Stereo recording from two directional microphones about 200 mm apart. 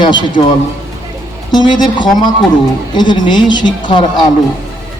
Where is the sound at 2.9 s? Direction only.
20° left (ahead or behind).